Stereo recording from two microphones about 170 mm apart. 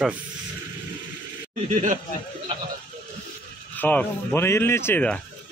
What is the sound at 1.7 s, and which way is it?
Speech, 50° right (ahead or behind).